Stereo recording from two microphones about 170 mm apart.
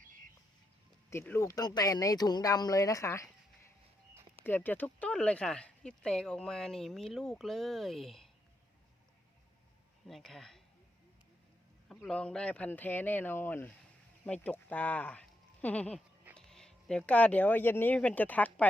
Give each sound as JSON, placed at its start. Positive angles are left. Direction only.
{"t": 1.1, "sound": "speech", "side_deg": 15}
{"t": 4.4, "sound": "speech", "side_deg": 10}
{"t": 10.1, "sound": "speech", "side_deg": 0}
{"t": 12.0, "sound": "speech", "side_deg": 5}